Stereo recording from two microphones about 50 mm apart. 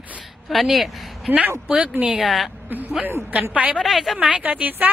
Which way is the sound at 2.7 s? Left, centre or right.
Right.